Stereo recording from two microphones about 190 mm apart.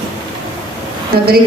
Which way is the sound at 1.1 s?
50° right (ahead or behind).